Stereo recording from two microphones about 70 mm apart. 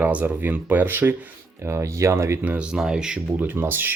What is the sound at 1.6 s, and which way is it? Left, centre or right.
Speech, right.